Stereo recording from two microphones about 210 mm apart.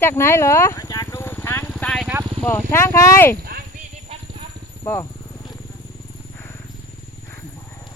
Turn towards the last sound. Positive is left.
turn(degrees=10)  # may be behind; listen again after turning